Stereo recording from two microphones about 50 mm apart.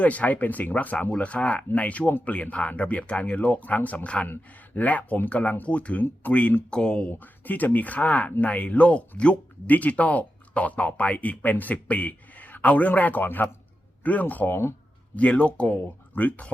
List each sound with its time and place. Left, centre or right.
0.0 s speech: left
6.7 s speech: centre
7.1 s speech: left
13.2 s a man's voice: left
14.0 s speech: left